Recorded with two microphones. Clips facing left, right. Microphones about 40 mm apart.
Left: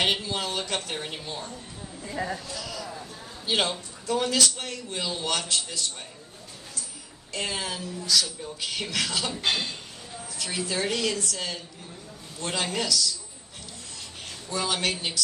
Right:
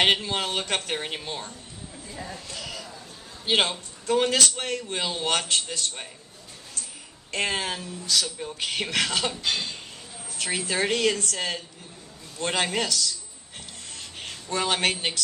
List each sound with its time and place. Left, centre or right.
0.0 s a man's voice: right
2.0 s speech: left
2.5 s a sound: right
3.4 s a man's voice: right
7.3 s a man's voice: right
9.4 s speech: left
10.3 s a man's voice: right
14.0 s a sound: right